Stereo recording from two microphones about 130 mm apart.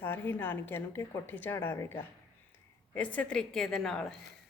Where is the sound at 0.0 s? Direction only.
15° left (ahead or behind).